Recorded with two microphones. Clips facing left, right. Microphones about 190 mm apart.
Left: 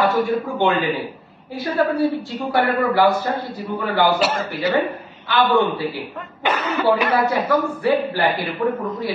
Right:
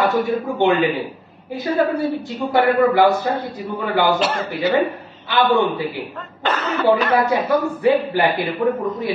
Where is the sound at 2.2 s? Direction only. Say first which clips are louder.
Right 3 dB; 20° right (ahead or behind).